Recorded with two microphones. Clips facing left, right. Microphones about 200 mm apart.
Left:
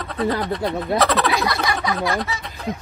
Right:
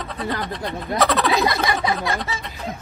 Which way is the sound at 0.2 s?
Centre (ahead or behind).